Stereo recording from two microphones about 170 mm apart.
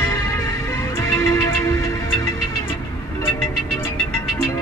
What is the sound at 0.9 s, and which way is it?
Music, 15° left (ahead or behind).